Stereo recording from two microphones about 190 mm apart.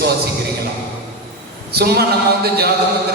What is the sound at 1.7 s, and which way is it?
A man's voice, 55° right (ahead or behind).